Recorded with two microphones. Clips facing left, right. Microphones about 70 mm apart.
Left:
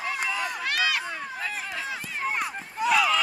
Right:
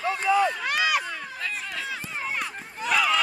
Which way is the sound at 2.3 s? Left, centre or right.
Centre.